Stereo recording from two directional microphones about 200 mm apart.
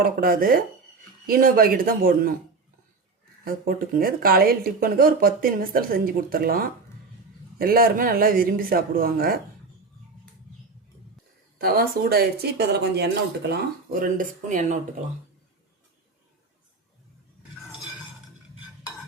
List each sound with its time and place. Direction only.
0.0 s speech: 45° right (ahead or behind)
3.4 s speech: 45° right (ahead or behind)
11.5 s speech: 50° right (ahead or behind)
14.2 s speech: 40° right (ahead or behind)